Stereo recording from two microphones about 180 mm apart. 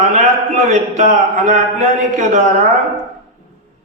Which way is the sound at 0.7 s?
40° right (ahead or behind).